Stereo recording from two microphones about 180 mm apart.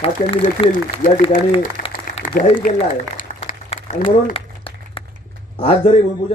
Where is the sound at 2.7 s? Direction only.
45° left (ahead or behind).